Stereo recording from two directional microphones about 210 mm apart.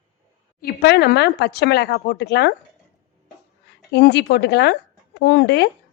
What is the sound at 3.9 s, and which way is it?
A woman's voice, 55° left (ahead or behind).